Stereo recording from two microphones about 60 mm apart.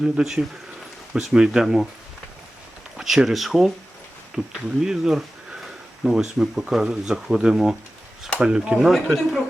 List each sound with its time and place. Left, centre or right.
0.0 s speech: centre
3.0 s speech: centre
4.4 s speech: left
4.8 s speech: centre
8.9 s speech: centre